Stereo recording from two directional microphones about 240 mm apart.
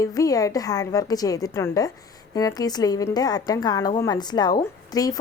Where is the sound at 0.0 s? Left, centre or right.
Centre.